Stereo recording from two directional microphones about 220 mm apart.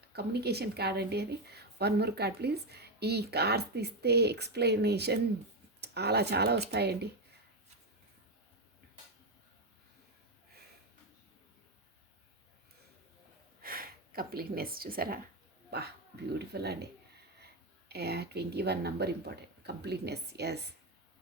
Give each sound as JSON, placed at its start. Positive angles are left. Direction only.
{"t": 0.1, "sound": "a woman's voice", "side_deg": -45}
{"t": 13.6, "sound": "speech", "side_deg": -40}
{"t": 16.4, "sound": "a woman's voice", "side_deg": -50}